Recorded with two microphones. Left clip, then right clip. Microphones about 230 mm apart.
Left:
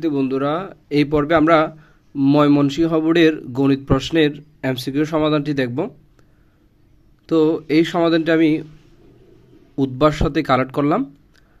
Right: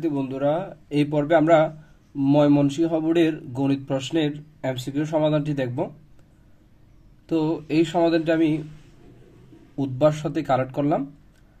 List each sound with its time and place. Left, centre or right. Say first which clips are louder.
0.0 s speech: left 4 dB; left
7.2 s speech: left 8 dB; left
9.9 s speech: left 4 dB; left